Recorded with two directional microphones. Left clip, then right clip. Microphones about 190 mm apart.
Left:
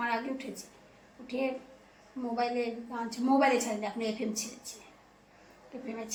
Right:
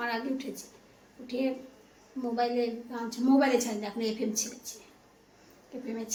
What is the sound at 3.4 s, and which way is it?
A woman's voice, 15° right (ahead or behind).